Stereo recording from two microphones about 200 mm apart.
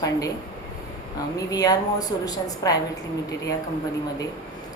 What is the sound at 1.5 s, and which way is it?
A woman's voice, 20° left (ahead or behind).